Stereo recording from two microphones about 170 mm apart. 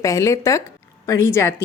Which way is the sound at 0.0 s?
20° left (ahead or behind).